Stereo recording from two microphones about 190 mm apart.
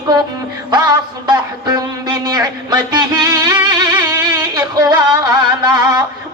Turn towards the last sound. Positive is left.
turn(degrees=-20)  # may be behind; listen again after turning